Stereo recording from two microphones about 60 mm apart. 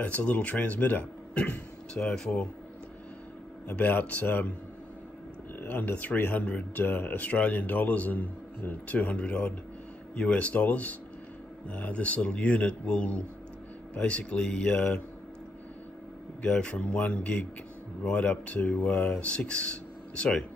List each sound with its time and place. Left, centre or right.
0.0 s speech: left
2.0 s speech: centre
3.6 s speech: left
5.6 s speech: left
16.4 s speech: left